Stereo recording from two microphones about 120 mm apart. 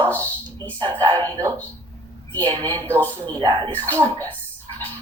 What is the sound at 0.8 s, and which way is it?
Speech, 45° right (ahead or behind).